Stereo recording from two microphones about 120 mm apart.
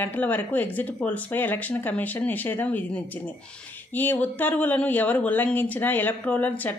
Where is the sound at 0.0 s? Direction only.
15° left (ahead or behind).